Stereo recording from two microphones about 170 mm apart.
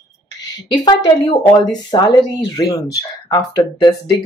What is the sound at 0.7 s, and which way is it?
Speech, 25° left (ahead or behind).